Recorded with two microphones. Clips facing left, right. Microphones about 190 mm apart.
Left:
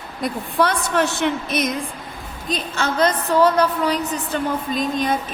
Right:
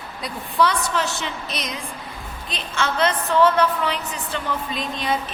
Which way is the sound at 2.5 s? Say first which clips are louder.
Left 3 dB; 40° left (ahead or behind).